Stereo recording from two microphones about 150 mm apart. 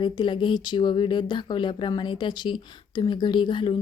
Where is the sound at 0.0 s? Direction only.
30° left (ahead or behind).